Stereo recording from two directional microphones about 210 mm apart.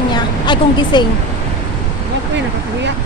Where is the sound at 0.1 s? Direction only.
20° left (ahead or behind).